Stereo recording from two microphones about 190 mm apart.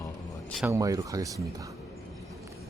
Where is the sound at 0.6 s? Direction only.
15° right (ahead or behind).